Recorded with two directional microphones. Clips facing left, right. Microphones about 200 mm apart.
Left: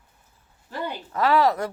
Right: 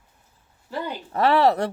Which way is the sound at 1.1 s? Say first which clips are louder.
Right 2 dB; 30° right (ahead or behind).